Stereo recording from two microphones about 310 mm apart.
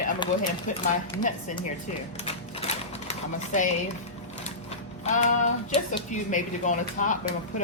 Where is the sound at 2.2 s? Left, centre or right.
Centre.